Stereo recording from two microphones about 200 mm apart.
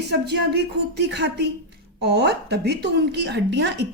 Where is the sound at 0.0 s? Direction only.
55° right (ahead or behind).